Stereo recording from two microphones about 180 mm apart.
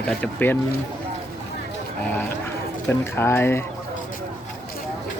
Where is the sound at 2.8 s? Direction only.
10° left (ahead or behind).